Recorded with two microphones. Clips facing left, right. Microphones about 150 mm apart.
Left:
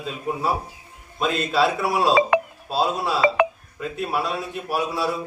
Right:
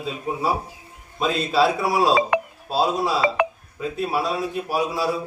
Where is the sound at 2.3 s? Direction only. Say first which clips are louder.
Left 2 dB; 90° left.